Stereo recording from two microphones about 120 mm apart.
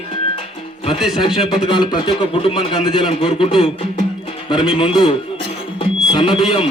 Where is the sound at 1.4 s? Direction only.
45° left (ahead or behind).